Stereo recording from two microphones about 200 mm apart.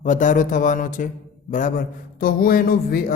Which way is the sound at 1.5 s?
40° left (ahead or behind).